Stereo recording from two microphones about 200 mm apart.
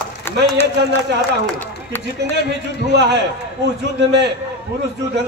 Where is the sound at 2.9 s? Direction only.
60° right (ahead or behind).